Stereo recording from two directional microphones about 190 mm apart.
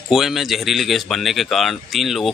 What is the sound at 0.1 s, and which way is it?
Speech, centre (ahead or behind).